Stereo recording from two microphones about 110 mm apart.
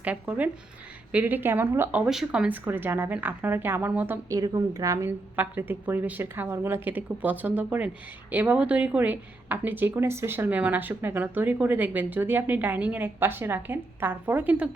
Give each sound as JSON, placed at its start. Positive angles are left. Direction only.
{"t": 0.0, "sound": "a woman's voice", "side_deg": -15}
{"t": 2.0, "sound": "a woman's voice", "side_deg": -5}
{"t": 2.6, "sound": "a woman's voice", "side_deg": -20}
{"t": 4.3, "sound": "a woman's voice", "side_deg": -30}
{"t": 5.4, "sound": "a woman's voice", "side_deg": -15}